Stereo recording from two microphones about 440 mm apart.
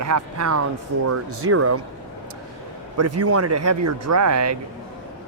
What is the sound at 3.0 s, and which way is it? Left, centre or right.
Speech, right.